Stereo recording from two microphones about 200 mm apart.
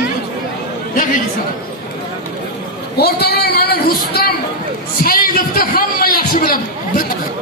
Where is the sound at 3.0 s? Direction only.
50° left (ahead or behind).